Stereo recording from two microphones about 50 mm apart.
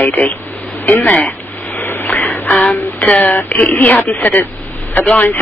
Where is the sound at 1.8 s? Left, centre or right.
Left.